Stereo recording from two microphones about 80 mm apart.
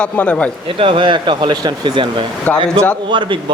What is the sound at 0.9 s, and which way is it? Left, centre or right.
Speech, right.